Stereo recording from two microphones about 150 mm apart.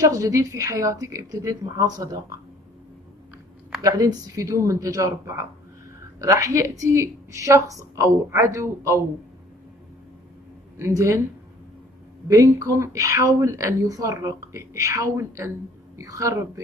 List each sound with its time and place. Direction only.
0.0 s speech: 20° right (ahead or behind)
3.8 s speech: 20° right (ahead or behind)
10.8 s speech: 20° right (ahead or behind)
12.3 s speech: 20° right (ahead or behind)